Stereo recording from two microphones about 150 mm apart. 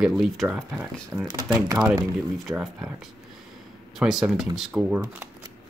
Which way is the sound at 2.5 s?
5° right (ahead or behind).